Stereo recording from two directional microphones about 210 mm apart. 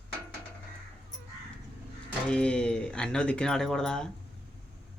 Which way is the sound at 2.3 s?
5° left (ahead or behind).